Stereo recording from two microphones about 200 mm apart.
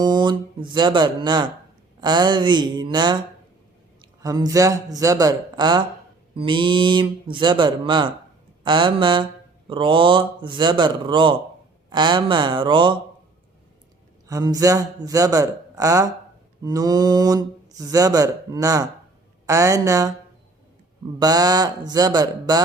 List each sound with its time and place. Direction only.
0.0 s speech: 20° right (ahead or behind)
4.2 s speech: 15° right (ahead or behind)
14.3 s speech: 15° right (ahead or behind)
21.2 s speech: 20° right (ahead or behind)